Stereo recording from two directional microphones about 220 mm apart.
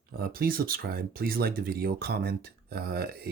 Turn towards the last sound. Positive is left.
turn(degrees=-45)  # may be behind; listen again after turning